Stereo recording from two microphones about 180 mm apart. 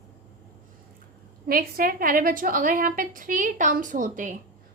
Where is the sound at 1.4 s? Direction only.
55° right (ahead or behind).